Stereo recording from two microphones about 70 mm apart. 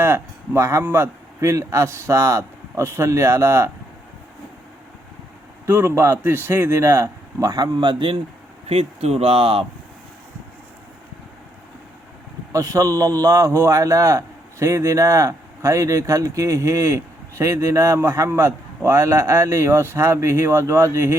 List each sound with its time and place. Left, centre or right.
0.0 s a man's voice: right
5.6 s speech: right
6.0 s a man's voice: right
6.3 s speech: right
7.5 s a man's voice: right
12.5 s a man's voice: right